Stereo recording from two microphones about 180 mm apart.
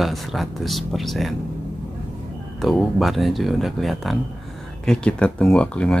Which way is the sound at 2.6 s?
Centre (ahead or behind).